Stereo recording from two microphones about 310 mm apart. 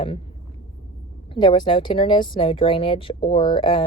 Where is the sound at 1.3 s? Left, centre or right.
Centre.